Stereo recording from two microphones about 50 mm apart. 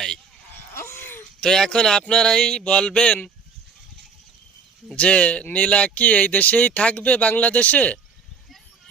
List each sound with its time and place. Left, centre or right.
0.7 s wheeze: left
1.4 s speech: centre
4.9 s speech: left